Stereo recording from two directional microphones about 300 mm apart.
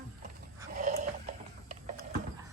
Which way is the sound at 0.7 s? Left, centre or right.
Right.